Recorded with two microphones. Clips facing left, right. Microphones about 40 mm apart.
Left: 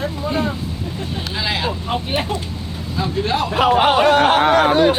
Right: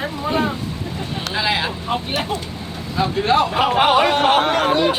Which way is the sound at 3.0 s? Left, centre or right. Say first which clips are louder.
Right 4 dB; right.